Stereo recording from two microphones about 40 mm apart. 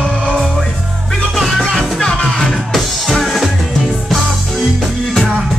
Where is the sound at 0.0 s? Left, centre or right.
Left.